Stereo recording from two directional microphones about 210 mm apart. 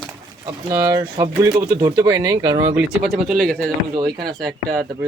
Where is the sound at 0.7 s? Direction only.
15° right (ahead or behind); by 3.7 s 5° left (ahead or behind).